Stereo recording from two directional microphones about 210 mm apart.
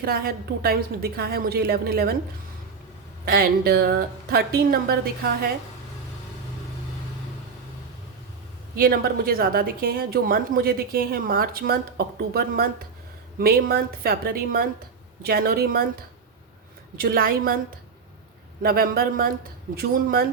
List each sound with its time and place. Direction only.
0.0 s a woman's voice: 45° right (ahead or behind)
3.2 s a woman's voice: 45° right (ahead or behind)
8.7 s a woman's voice: 45° right (ahead or behind)
17.0 s a woman's voice: 45° right (ahead or behind)
18.6 s a woman's voice: 45° right (ahead or behind)